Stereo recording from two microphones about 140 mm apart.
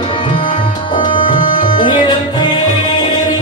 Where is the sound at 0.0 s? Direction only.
40° left (ahead or behind).